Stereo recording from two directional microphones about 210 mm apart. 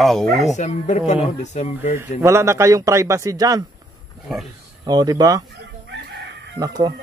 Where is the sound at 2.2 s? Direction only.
15° right (ahead or behind).